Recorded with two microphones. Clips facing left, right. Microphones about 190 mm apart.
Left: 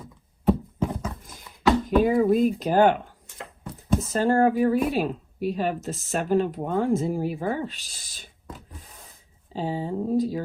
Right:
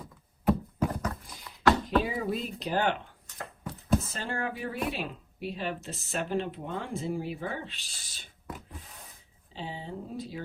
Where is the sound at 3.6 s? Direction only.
Centre (ahead or behind).